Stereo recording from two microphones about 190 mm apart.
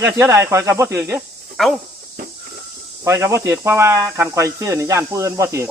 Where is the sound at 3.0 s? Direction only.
15° right (ahead or behind).